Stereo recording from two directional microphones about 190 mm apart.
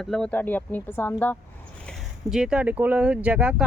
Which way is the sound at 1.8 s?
5° right (ahead or behind).